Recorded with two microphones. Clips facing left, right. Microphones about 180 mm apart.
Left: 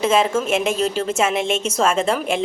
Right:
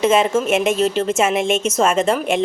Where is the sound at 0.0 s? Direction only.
5° right (ahead or behind).